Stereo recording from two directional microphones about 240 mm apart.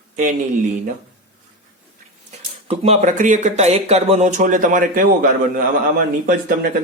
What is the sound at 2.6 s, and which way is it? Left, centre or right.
Speech, right.